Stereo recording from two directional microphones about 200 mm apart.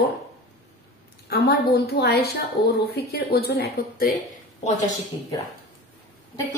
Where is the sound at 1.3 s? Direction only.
55° left (ahead or behind).